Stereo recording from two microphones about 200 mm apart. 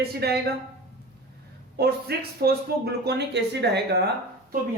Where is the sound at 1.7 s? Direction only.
50° right (ahead or behind).